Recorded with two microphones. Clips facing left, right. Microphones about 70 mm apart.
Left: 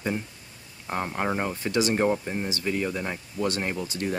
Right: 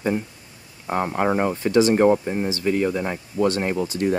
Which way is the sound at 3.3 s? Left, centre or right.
Right.